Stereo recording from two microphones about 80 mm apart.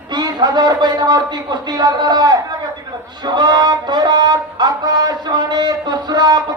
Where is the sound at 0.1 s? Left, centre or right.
Right.